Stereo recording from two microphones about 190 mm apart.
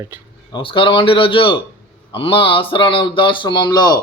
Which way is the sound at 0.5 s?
25° left (ahead or behind).